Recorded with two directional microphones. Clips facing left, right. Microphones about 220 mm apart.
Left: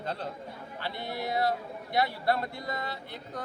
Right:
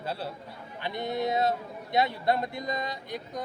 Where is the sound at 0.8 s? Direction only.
20° right (ahead or behind).